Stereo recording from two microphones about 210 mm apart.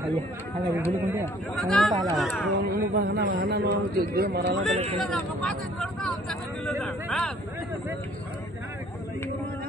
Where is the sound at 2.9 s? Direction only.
60° right (ahead or behind).